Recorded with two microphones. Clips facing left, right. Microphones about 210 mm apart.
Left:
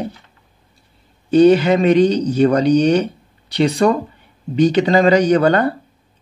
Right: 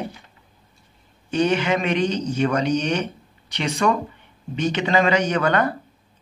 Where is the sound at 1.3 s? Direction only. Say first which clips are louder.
Left 10 dB; 35° left (ahead or behind).